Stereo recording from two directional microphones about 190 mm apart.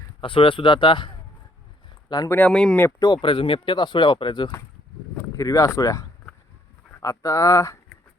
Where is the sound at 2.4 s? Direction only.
5° left (ahead or behind).